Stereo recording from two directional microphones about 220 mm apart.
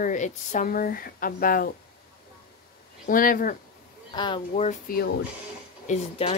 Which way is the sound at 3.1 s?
40° left (ahead or behind).